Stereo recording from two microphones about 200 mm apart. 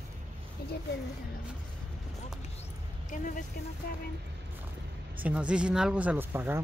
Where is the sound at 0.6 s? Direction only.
50° left (ahead or behind).